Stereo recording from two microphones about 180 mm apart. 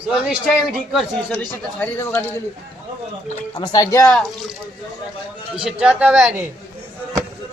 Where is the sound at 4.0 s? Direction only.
5° left (ahead or behind).